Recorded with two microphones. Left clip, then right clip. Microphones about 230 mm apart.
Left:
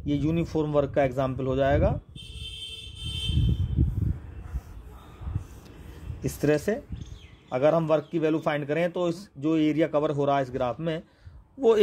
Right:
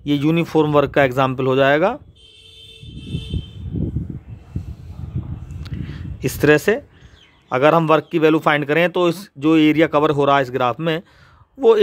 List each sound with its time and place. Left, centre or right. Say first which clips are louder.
0.0 s a man's voice: right 9 dB; right
6.2 s a man's voice: right 11 dB; right